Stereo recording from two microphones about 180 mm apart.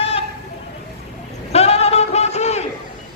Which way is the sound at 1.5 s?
35° left (ahead or behind).